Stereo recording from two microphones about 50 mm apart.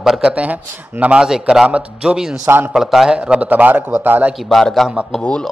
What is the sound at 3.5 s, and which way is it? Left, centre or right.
Speech, right.